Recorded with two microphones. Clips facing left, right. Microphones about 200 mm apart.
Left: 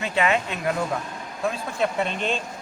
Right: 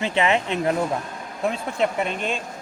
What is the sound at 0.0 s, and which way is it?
Speech, 25° right (ahead or behind).